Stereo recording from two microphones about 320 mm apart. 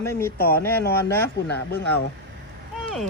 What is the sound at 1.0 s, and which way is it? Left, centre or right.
Speech, centre.